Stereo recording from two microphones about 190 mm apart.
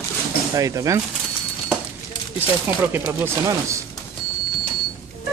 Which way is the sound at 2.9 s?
10° right (ahead or behind).